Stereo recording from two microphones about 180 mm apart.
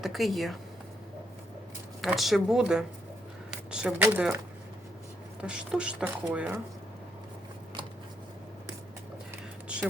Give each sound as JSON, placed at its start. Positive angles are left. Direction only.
{"t": 0.0, "sound": "speech", "side_deg": 0}
{"t": 2.0, "sound": "speech", "side_deg": 0}
{"t": 5.4, "sound": "speech", "side_deg": -5}